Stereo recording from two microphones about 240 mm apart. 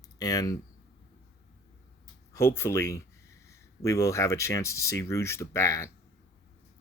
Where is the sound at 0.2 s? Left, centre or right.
Centre.